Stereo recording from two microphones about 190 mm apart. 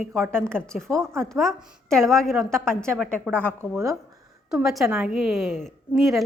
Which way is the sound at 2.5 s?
15° right (ahead or behind).